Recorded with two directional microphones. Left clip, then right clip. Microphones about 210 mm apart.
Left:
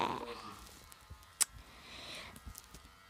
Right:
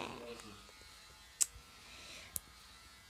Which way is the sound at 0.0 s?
25° left (ahead or behind).